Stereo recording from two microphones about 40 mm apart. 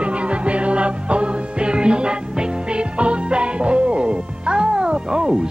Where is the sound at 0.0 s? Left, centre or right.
Right.